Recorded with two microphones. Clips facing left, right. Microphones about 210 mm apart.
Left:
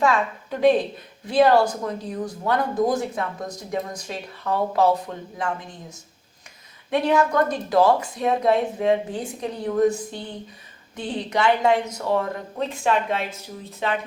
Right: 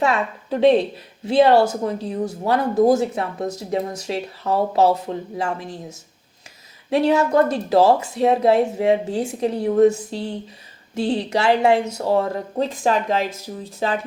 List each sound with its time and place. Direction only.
0.0 s speech: 25° right (ahead or behind)
6.9 s speech: 25° right (ahead or behind)
10.9 s speech: 75° right (ahead or behind)
11.3 s speech: 25° right (ahead or behind)